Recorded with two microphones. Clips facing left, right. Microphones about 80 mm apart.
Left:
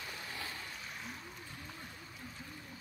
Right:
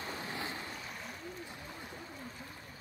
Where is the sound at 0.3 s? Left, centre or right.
Right.